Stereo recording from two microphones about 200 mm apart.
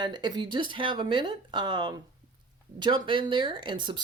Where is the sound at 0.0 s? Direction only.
20° right (ahead or behind).